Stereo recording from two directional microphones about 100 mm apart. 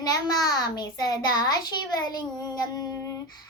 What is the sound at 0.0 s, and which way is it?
A child's voice, 40° left (ahead or behind).